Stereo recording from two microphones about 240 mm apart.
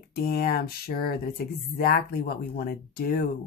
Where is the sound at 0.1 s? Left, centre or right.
Left.